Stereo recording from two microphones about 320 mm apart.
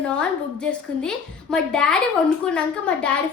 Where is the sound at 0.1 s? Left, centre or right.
Centre.